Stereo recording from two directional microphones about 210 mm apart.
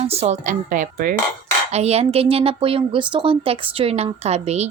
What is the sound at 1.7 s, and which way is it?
A woman's voice, 30° right (ahead or behind).